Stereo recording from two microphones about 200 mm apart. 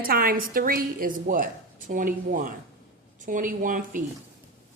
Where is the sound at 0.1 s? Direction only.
50° right (ahead or behind).